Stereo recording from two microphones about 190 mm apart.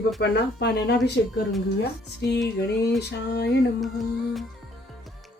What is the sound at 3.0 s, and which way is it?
Speech, 60° left (ahead or behind).